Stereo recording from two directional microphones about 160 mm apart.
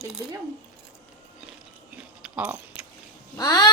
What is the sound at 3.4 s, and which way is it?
Speech, 25° left (ahead or behind).